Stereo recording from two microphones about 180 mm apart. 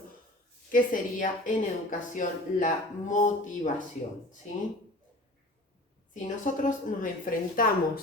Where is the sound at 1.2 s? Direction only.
45° left (ahead or behind).